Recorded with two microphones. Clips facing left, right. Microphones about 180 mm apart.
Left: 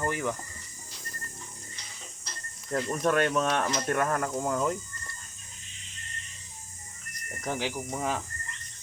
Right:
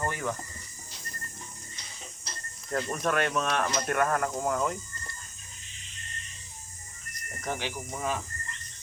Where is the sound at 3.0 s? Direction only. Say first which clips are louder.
Left 4 dB; 25° left (ahead or behind).